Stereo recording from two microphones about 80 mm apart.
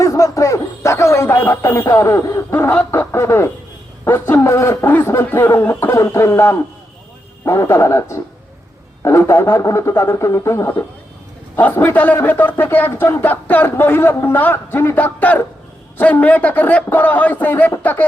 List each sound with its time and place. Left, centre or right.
0.0 s music: left
2.9 s a sound: left
4.0 s a man's voice: left
5.9 s speech: left
11.6 s a man's voice: left